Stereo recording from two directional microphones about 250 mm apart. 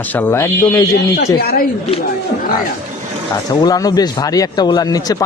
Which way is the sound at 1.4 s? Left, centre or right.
Left.